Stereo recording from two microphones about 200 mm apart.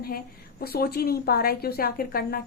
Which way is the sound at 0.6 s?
50° left (ahead or behind).